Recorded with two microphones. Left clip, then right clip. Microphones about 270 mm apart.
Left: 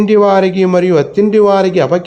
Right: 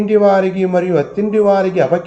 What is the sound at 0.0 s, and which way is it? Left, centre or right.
Speech, left.